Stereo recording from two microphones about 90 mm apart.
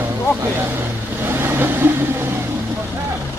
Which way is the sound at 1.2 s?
25° right (ahead or behind).